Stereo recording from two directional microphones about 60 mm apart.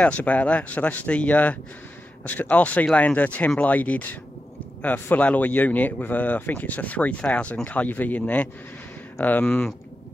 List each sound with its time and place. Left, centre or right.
0.0 s speech: left